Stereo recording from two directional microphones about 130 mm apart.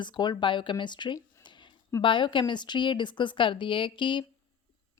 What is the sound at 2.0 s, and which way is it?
Speech, 40° left (ahead or behind).